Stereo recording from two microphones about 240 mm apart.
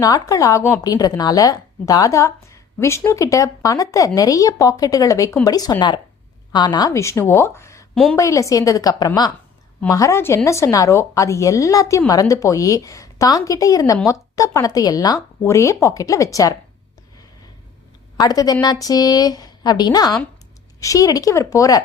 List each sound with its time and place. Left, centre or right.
0.0 s a woman's voice: centre
18.2 s a woman's voice: centre